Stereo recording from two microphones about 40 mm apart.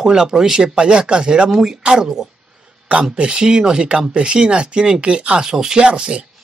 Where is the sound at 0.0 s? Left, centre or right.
Centre.